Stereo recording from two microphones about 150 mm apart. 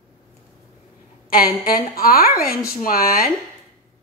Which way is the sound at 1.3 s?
80° left.